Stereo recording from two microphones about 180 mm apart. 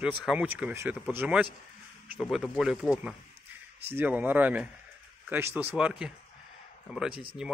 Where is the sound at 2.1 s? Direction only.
Centre (ahead or behind).